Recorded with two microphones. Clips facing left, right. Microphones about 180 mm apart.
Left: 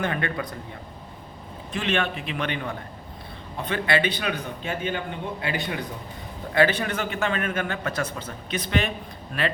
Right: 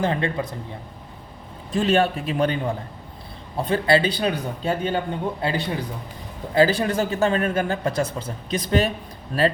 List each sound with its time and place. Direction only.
0.0 s speech: 30° right (ahead or behind)
1.7 s a man's voice: 35° right (ahead or behind)